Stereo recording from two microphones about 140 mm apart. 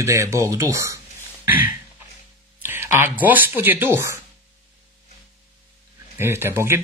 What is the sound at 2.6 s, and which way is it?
Speech, 15° right (ahead or behind).